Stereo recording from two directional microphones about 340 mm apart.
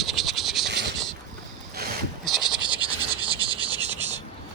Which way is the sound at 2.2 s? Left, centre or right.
Centre.